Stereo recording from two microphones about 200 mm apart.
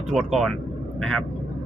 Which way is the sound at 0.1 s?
Centre (ahead or behind).